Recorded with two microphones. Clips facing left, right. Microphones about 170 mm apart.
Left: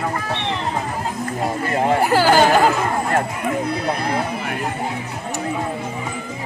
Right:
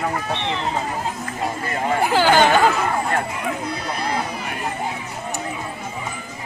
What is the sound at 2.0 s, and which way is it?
Speech, 5° left (ahead or behind).